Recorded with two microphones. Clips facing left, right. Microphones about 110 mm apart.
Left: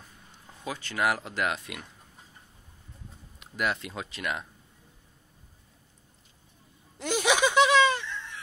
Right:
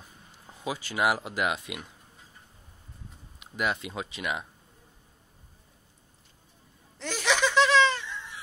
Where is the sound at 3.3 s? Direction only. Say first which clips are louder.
Even; 5° right (ahead or behind).